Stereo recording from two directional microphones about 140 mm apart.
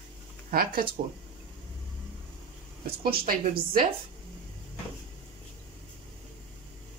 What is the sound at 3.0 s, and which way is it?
Speech, 90° right.